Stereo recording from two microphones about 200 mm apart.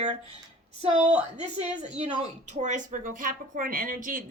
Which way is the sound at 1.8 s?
30° right (ahead or behind).